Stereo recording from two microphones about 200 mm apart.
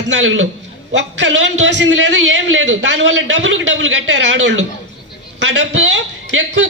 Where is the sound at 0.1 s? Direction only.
70° right (ahead or behind).